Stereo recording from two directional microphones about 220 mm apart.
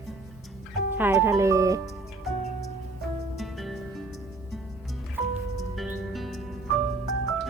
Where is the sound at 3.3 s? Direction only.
Centre (ahead or behind).